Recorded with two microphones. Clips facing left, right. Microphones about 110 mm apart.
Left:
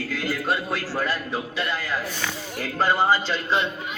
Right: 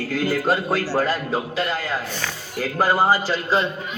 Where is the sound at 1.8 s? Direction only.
15° right (ahead or behind).